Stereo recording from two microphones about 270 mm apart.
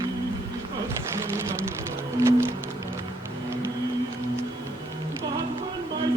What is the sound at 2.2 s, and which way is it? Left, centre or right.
Music, centre.